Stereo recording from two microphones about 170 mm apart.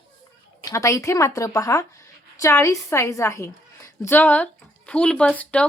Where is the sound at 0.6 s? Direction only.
20° left (ahead or behind).